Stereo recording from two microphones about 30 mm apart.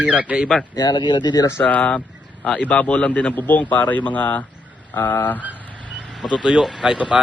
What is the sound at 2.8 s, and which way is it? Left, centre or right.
Speech, left.